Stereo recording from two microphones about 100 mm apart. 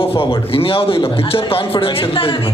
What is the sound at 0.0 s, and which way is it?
A man's voice, 70° left (ahead or behind).